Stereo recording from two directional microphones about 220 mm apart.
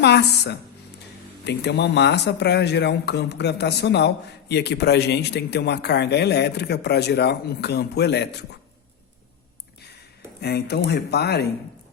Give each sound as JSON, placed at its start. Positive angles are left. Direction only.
{"t": 0.0, "sound": "speech", "side_deg": 50}
{"t": 10.4, "sound": "speech", "side_deg": 50}